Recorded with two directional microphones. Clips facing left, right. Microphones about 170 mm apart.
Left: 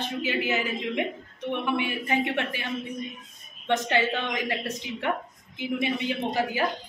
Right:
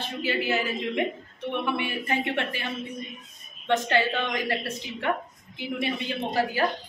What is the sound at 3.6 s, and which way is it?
Speech, 15° left (ahead or behind).